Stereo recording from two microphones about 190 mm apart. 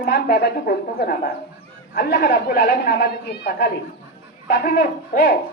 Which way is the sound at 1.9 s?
60° left (ahead or behind).